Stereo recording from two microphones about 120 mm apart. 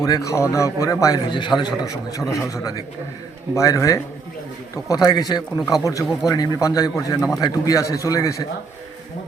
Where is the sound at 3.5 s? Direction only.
25° left (ahead or behind).